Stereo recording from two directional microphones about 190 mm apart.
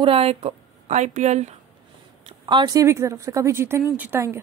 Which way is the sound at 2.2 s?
25° right (ahead or behind).